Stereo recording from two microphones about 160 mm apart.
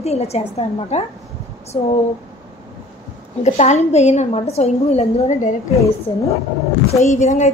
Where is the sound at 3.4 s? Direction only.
45° left (ahead or behind).